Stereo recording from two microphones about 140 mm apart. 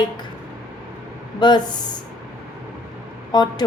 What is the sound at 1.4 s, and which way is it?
Speech, 30° left (ahead or behind).